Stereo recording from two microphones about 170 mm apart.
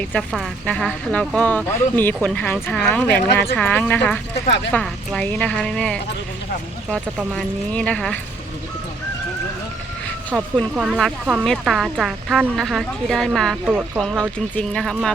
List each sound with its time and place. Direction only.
0.3 s speech: 5° left (ahead or behind)
4.4 s speech: 90° left
4.7 s speech: 5° left (ahead or behind)
7.7 s speech: 5° left (ahead or behind)
10.3 s speech: 5° right (ahead or behind)
13.7 s speech: 10° right (ahead or behind)
14.0 s speech: centre (ahead or behind)